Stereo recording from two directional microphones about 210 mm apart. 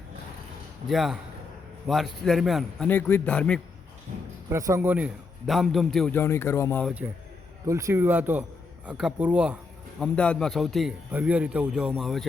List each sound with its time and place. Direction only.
0.9 s a man's voice: centre (ahead or behind)
4.5 s a man's voice: 15° right (ahead or behind); by 6.9 s 10° left (ahead or behind)
7.7 s a man's voice: 15° right (ahead or behind)
10.0 s a man's voice: 5° left (ahead or behind)